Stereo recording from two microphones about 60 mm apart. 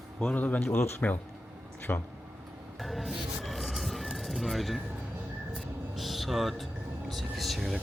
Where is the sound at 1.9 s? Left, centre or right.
Left.